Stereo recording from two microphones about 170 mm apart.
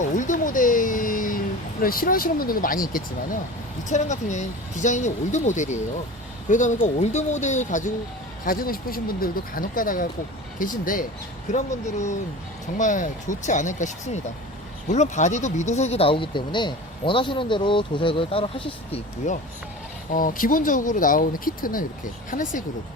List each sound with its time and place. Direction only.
0.2 s a sound: 50° left (ahead or behind)
1.8 s speech: 55° left (ahead or behind)
8.4 s speech: 60° left (ahead or behind); by 18.9 s 30° left (ahead or behind)
19.2 s speech: 45° left (ahead or behind)